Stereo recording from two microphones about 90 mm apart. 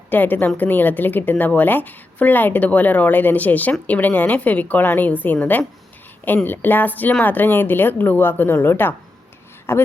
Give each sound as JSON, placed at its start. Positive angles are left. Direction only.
{"t": 0.1, "sound": "a woman's voice", "side_deg": 20}